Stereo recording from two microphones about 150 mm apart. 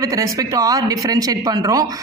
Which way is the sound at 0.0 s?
20° right (ahead or behind).